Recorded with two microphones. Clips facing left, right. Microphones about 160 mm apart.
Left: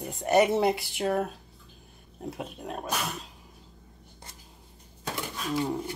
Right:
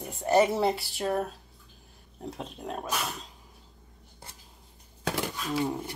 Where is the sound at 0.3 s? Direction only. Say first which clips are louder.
Left 1 dB; 15° left (ahead or behind).